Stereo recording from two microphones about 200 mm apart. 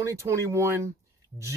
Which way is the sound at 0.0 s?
15° right (ahead or behind).